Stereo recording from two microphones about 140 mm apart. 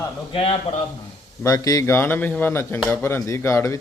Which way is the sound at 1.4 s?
25° left (ahead or behind).